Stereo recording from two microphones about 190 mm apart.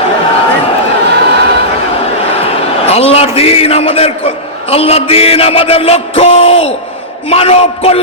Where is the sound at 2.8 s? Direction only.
30° left (ahead or behind).